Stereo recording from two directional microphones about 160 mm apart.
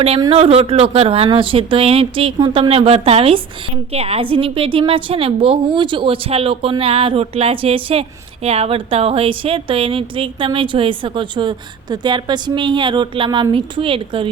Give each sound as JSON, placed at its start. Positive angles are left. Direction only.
{"t": 0.2, "sound": "a woman's voice", "side_deg": -35}